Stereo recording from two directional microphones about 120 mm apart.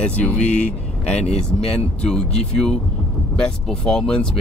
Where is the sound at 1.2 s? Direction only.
60° left (ahead or behind).